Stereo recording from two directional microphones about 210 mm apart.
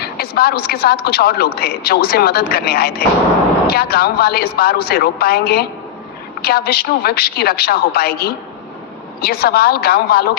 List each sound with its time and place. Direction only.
0.0 s speech: 50° left (ahead or behind)